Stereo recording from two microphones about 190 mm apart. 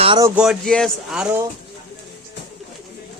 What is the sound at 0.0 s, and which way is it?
Speech, 25° right (ahead or behind).